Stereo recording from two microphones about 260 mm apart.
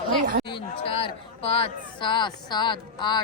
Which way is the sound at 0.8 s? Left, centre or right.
Centre.